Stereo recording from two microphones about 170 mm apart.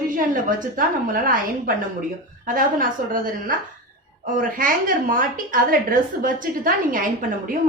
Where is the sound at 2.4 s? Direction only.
55° right (ahead or behind).